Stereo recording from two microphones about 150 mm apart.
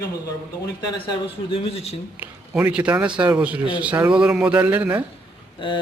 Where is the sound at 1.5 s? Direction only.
40° left (ahead or behind).